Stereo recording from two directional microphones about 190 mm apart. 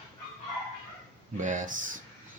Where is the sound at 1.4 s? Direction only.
40° right (ahead or behind).